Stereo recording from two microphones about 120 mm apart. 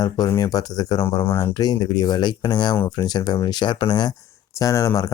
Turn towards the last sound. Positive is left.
turn(degrees=30)  # may be behind; listen again after turning